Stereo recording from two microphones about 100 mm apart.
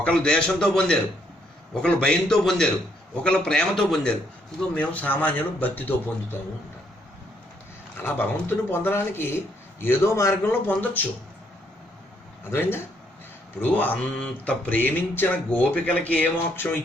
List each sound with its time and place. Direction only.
0.0 s a man's voice: 10° left (ahead or behind)
4.7 s speech: 15° left (ahead or behind)
8.0 s speech: 20° left (ahead or behind)
10.7 s speech: 15° left (ahead or behind)
13.6 s speech: 15° left (ahead or behind)